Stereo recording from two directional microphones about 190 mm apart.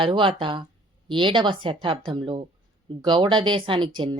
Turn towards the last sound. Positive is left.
turn(degrees=-25)  # may be behind; listen again after turning